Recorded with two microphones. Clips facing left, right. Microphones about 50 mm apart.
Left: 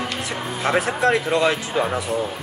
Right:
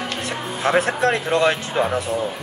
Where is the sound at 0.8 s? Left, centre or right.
Right.